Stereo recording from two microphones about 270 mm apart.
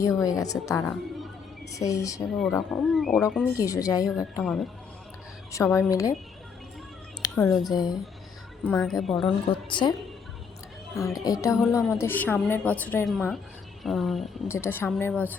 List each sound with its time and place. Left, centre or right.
0.0 s a woman's voice: centre
2.3 s a woman's voice: centre
3.6 s a woman's voice: centre
7.2 s a sound: centre
7.6 s a woman's voice: centre
8.6 s a woman's voice: centre
9.1 s a woman's voice: centre
10.9 s a woman's voice: centre
11.5 s a woman's voice: centre
11.9 s a woman's voice: centre